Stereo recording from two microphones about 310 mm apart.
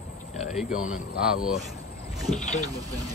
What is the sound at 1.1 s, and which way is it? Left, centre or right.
Speech, centre.